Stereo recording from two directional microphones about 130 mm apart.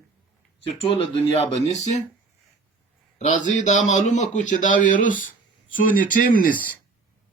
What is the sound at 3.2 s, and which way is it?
A man's voice, 70° left (ahead or behind).